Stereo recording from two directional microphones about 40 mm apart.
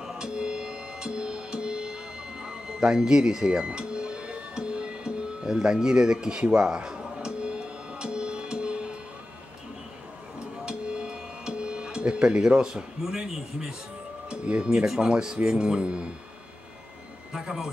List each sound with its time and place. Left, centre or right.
0.2 s music: right
10.6 s music: right
14.3 s speech: right
17.3 s a man's voice: centre